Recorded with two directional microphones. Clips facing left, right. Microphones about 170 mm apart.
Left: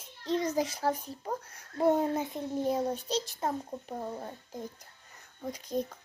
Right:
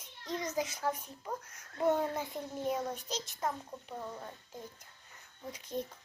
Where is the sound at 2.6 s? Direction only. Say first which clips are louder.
Left 4 dB; 30° left (ahead or behind).